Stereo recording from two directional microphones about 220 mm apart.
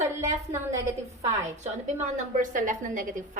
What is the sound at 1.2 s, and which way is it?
A woman's voice, 30° right (ahead or behind).